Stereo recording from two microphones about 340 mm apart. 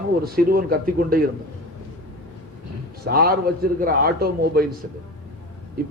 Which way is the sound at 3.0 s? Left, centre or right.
Right.